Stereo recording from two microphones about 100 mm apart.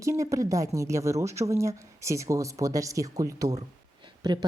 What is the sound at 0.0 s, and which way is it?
Speech, 30° right (ahead or behind).